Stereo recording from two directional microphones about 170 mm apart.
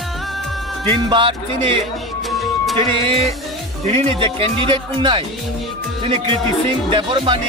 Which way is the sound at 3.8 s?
30° right (ahead or behind).